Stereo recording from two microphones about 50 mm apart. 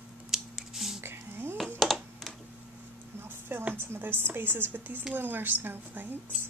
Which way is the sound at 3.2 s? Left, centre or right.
Right.